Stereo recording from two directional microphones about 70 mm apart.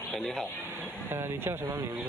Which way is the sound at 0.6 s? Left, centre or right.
Right.